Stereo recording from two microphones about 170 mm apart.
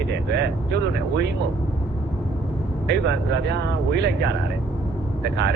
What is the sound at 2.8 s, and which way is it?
Speech, 90° right.